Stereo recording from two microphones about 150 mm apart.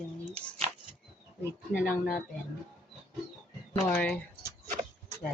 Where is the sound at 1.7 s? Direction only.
65° left (ahead or behind).